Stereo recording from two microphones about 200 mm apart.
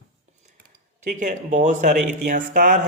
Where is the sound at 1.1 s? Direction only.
40° right (ahead or behind).